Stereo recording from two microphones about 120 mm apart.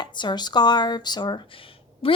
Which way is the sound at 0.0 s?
40° left (ahead or behind).